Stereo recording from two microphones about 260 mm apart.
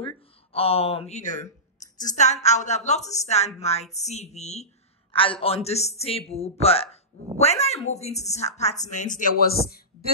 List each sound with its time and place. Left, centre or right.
0.0 s a woman's voice: left